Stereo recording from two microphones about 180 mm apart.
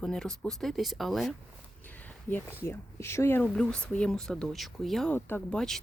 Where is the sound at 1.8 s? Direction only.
10° left (ahead or behind).